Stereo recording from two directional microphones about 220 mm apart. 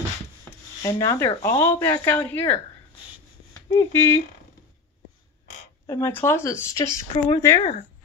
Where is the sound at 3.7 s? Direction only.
10° left (ahead or behind).